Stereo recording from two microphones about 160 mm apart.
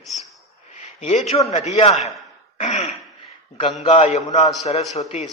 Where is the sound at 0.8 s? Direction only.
45° left (ahead or behind).